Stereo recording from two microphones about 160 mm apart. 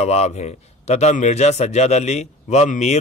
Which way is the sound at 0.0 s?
45° left (ahead or behind).